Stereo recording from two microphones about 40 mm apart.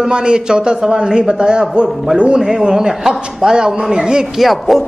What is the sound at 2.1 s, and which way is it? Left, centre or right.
A man's voice, right.